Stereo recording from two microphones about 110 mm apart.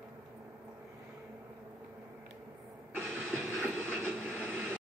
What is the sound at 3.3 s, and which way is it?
Vehicle, 15° right (ahead or behind).